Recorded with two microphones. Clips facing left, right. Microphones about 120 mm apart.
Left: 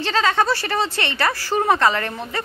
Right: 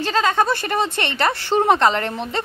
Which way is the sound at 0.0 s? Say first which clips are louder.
Right 1 dB; 15° right (ahead or behind).